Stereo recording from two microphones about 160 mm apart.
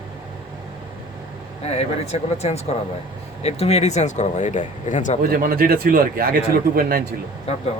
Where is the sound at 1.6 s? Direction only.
40° left (ahead or behind).